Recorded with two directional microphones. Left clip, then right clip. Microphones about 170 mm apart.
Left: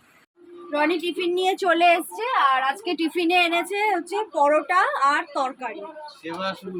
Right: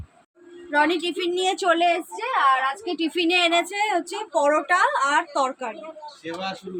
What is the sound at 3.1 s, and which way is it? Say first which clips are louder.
A woman's voice: even; 15° right (ahead or behind).